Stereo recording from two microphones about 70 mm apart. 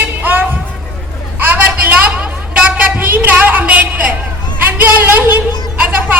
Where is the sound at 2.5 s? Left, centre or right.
Centre.